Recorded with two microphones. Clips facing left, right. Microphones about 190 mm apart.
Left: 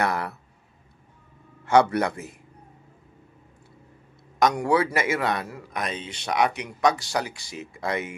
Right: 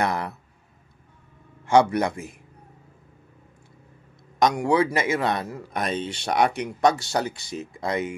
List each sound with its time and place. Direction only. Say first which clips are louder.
0.0 s a man's voice: even; 20° right (ahead or behind)
1.7 s speech: right 1 dB; 15° right (ahead or behind)
4.4 s a man's voice: right 1 dB; 20° right (ahead or behind)